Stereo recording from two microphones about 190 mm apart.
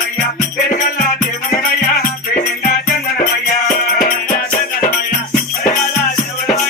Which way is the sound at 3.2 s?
50° left (ahead or behind).